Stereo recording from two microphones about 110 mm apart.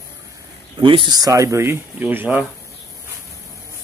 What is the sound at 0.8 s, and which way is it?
Speech, 50° right (ahead or behind).